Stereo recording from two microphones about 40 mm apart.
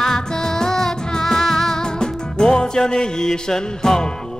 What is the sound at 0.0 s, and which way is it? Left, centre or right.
Music, centre.